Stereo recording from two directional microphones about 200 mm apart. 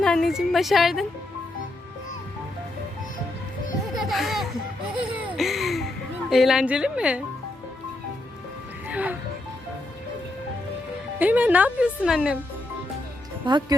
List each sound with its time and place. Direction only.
0.0 s a woman's voice: centre (ahead or behind)
4.0 s laughter: centre (ahead or behind)
6.3 s a woman's voice: centre (ahead or behind)
8.9 s music: 5° right (ahead or behind)
11.2 s speech: 10° right (ahead or behind)
13.4 s speech: 20° right (ahead or behind)